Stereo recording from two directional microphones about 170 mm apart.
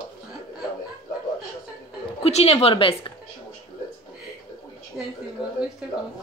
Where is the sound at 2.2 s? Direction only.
35° left (ahead or behind).